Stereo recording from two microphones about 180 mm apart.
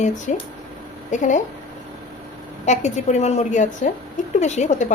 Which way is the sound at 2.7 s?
40° left (ahead or behind).